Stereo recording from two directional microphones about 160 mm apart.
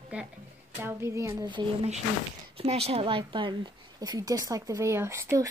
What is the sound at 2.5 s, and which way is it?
Speech, 40° right (ahead or behind).